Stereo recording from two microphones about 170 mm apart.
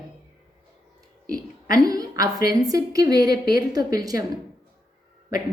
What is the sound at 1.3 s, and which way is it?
A woman's voice, 20° right (ahead or behind).